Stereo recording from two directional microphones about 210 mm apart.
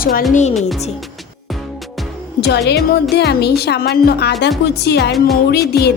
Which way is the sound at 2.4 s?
55° left (ahead or behind).